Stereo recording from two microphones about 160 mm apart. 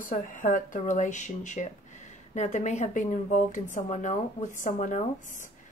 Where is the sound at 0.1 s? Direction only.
55° left (ahead or behind).